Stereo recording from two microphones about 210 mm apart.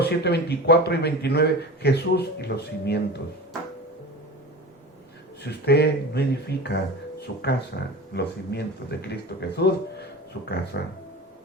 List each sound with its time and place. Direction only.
0.0 s a man's voice: 50° left (ahead or behind)
5.4 s a man's voice: 50° left (ahead or behind)